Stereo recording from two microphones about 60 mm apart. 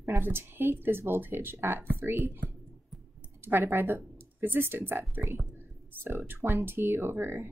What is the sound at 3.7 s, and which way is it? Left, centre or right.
Speech, right.